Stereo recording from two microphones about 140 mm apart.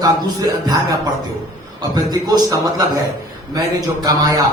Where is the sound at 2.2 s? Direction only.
25° right (ahead or behind).